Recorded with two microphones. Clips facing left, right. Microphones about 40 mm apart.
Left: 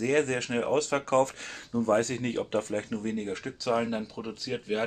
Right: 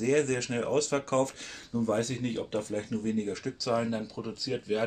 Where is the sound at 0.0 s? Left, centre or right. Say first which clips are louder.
Even; left.